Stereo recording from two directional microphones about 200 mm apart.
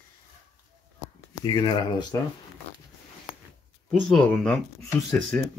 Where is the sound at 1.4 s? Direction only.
20° left (ahead or behind).